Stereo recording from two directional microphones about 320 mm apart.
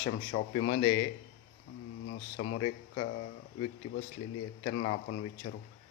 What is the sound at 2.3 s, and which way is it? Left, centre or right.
Speech, left.